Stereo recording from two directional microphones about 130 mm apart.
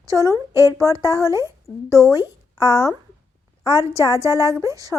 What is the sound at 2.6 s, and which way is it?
Speech, 30° left (ahead or behind).